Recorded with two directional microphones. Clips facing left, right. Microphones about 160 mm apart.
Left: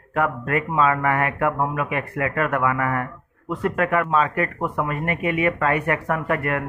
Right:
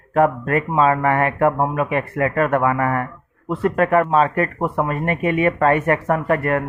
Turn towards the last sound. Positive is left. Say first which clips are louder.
# right 5 dB
turn(degrees=-40)  # may be behind; listen again after turning